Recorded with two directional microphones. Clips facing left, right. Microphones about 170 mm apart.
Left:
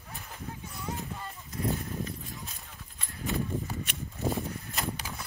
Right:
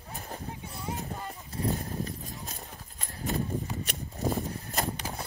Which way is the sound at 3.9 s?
40° right (ahead or behind).